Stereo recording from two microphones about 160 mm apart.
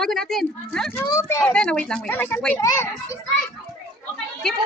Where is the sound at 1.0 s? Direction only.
20° left (ahead or behind).